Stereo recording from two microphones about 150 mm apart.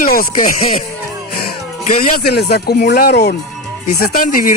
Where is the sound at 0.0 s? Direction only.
75° left (ahead or behind).